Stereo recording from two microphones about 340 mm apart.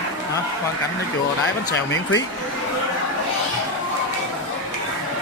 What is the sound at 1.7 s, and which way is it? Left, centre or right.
Speech, left.